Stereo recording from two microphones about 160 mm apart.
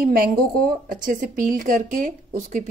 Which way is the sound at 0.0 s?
65° right (ahead or behind).